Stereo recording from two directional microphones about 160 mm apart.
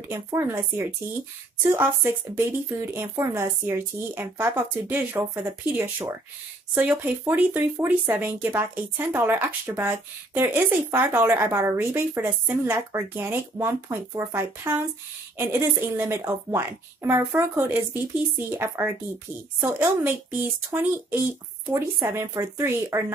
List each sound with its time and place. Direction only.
0.1 s speech: 15° right (ahead or behind)
2.3 s speech: 15° right (ahead or behind)